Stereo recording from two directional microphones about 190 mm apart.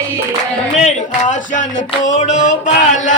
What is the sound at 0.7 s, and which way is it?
Music, 40° left (ahead or behind).